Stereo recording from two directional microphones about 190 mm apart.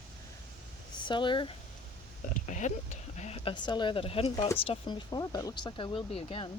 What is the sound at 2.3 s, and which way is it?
Speech, 40° left (ahead or behind).